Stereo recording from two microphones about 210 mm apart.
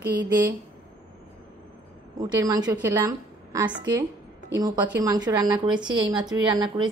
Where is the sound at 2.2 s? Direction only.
15° right (ahead or behind).